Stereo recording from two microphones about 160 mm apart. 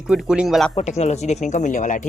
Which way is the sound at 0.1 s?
5° right (ahead or behind).